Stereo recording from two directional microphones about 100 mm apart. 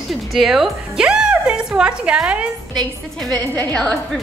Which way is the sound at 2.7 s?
5° left (ahead or behind).